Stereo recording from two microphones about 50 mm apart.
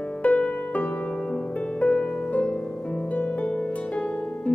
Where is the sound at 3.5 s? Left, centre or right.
Left.